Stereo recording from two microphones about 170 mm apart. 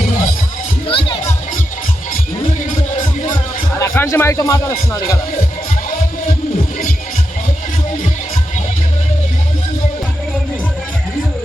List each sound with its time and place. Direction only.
0.9 s music: 30° left (ahead or behind)
3.8 s a man's voice: 15° left (ahead or behind)